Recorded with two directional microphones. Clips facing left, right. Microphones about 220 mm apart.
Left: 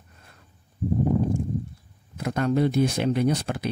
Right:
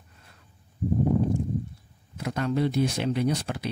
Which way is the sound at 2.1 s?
50° left (ahead or behind).